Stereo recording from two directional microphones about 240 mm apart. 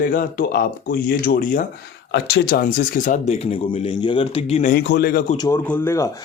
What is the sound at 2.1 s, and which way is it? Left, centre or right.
Speech, left.